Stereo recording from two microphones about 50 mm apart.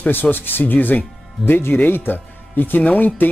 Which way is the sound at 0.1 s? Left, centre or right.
Left.